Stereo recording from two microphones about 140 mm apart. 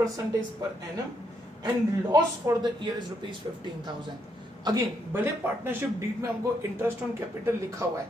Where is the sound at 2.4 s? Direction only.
20° right (ahead or behind).